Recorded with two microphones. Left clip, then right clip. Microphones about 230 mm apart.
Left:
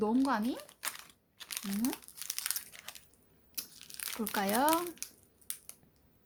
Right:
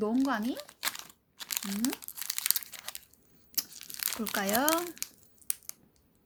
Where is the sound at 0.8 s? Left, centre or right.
Right.